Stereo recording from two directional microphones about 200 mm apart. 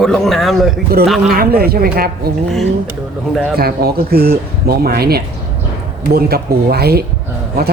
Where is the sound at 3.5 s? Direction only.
50° right (ahead or behind).